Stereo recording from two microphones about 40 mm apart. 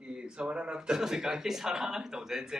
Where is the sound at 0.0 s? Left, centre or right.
Right.